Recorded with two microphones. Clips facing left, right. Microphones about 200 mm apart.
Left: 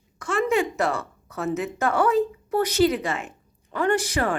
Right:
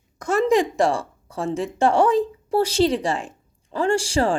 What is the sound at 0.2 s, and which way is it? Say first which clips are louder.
A woman's voice: right 4 dB; 40° right (ahead or behind).